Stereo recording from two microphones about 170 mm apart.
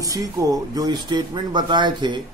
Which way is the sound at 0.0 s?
20° right (ahead or behind).